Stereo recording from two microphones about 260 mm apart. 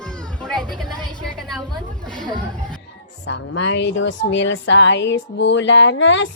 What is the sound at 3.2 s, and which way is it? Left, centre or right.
A woman's voice, left.